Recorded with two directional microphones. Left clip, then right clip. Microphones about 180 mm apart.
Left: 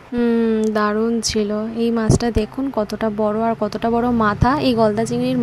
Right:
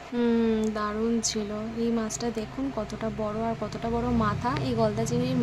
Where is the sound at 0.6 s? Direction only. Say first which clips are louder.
Left 10 dB; 45° left (ahead or behind).